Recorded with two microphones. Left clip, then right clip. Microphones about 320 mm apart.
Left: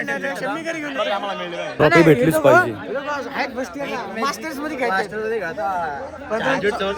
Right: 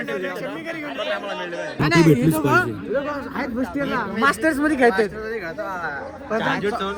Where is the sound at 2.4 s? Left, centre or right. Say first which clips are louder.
Left 5 dB; centre.